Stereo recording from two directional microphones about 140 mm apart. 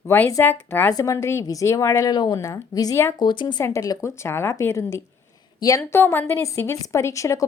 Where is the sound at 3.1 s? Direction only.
35° left (ahead or behind).